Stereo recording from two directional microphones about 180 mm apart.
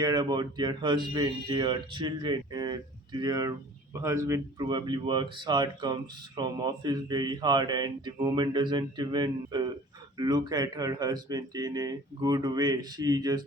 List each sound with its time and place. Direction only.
0.0 s speech: 20° right (ahead or behind)